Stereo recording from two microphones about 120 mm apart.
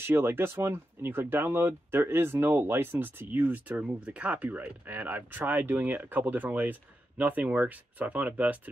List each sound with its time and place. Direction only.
0.0 s speech: 20° right (ahead or behind)